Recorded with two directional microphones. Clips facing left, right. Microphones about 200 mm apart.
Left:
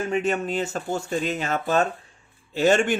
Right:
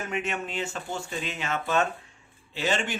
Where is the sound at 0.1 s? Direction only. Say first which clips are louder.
Left 7 dB; 35° left (ahead or behind).